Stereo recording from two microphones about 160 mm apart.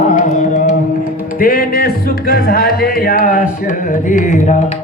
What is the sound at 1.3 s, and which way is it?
Music, 65° left (ahead or behind).